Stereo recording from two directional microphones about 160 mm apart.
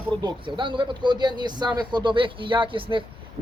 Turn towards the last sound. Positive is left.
turn(degrees=-30)  # may be behind; listen again after turning